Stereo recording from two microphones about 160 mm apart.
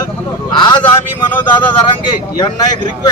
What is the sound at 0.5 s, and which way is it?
Vehicle, 30° left (ahead or behind).